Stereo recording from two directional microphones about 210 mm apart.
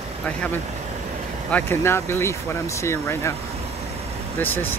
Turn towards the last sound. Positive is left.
turn(degrees=10)  # may be behind; listen again after turning